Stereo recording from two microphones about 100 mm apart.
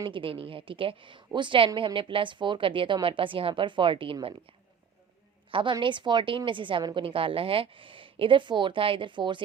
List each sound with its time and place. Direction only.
0.0 s a woman's voice: 60° right (ahead or behind)
5.5 s a woman's voice: 55° right (ahead or behind)